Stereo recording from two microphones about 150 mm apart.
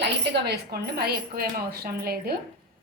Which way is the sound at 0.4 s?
90° right.